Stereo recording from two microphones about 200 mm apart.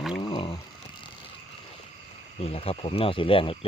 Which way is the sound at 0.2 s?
25° left (ahead or behind).